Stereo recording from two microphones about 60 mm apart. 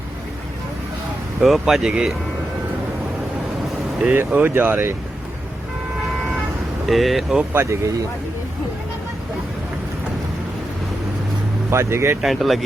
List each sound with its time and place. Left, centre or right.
1.4 s speech: centre
4.1 s speech: right
6.8 s speech: centre
7.5 s speech: right
11.7 s speech: right
12.2 s speech: centre